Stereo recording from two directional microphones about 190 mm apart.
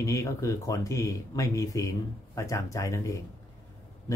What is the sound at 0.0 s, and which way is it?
Speech, 15° left (ahead or behind).